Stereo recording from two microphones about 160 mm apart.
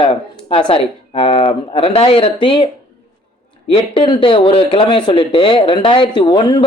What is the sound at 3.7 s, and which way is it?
Speech, 35° left (ahead or behind).